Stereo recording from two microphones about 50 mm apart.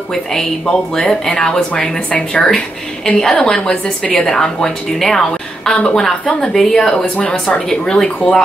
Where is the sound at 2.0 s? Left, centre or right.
Centre.